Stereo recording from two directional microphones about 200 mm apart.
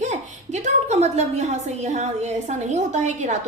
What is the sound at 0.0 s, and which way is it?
A woman's voice, 40° right (ahead or behind).